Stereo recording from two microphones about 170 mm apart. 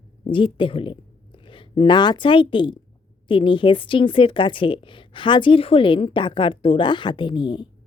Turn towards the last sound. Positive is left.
turn(degrees=25)  # may be behind; listen again after turning